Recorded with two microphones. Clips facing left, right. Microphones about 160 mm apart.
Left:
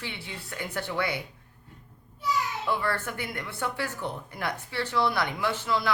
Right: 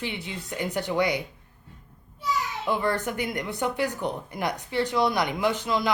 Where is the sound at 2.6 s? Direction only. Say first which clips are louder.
Right 7 dB; 15° right (ahead or behind).